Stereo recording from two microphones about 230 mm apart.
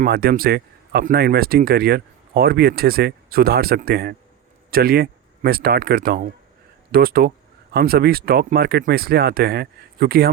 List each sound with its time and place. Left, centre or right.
0.0 s speech: right